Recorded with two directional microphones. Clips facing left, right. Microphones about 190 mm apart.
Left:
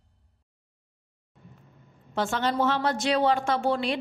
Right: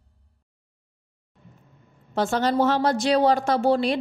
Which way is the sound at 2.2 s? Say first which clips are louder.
Right 4 dB; 40° right (ahead or behind).